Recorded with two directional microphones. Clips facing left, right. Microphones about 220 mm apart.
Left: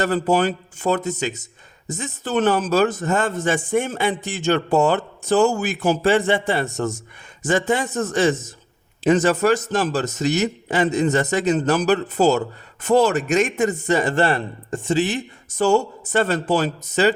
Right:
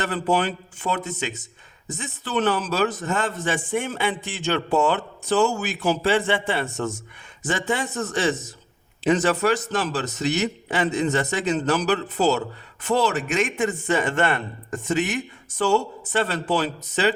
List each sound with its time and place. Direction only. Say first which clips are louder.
0.0 s a man's voice: left 4 dB; 40° left (ahead or behind)
15.4 s a man's voice: left 4 dB; 45° left (ahead or behind)